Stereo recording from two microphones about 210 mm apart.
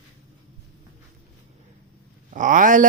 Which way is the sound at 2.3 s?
40° right (ahead or behind).